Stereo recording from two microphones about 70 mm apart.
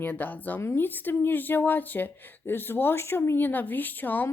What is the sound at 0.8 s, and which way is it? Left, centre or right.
Speech, left.